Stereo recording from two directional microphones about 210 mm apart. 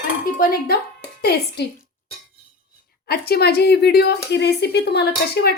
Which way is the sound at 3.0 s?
50° left (ahead or behind).